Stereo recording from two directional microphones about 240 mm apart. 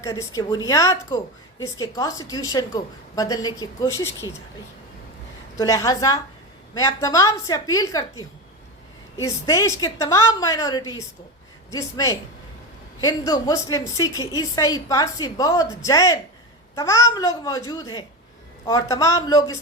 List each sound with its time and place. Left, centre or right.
0.0 s a woman's voice: centre
5.5 s a woman's voice: centre
9.2 s a woman's voice: centre